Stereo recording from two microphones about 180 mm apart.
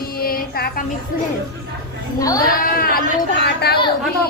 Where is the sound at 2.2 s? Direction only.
20° left (ahead or behind).